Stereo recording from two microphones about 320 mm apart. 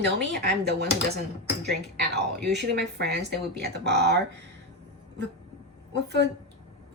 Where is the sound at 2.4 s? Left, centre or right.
Right.